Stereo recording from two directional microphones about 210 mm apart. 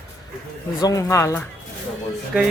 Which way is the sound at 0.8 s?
15° left (ahead or behind).